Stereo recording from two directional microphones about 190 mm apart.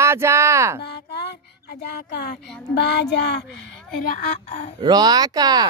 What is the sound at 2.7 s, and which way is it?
A woman's voice, 60° left (ahead or behind).